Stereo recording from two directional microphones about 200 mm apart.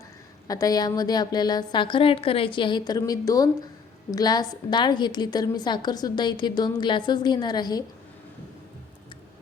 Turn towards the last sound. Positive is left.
turn(degrees=20)  # may be behind; listen again after turning